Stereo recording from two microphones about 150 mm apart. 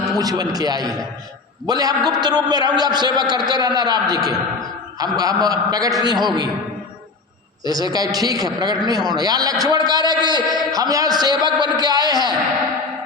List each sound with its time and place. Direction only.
0.2 s a man's voice: 25° right (ahead or behind)
7.6 s a man's voice: 25° right (ahead or behind)